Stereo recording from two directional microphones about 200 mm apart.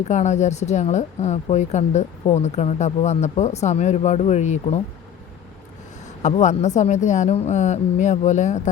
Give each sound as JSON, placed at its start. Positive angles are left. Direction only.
{"t": 0.0, "sound": "speech", "side_deg": 35}
{"t": 6.2, "sound": "speech", "side_deg": 35}